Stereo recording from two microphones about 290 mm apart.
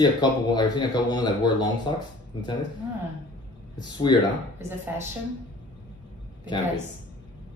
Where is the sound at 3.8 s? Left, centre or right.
Centre.